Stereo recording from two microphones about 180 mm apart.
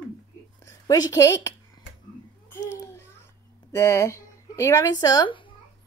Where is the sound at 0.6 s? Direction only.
20° left (ahead or behind).